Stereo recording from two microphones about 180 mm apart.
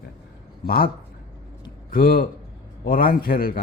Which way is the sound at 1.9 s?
55° left (ahead or behind).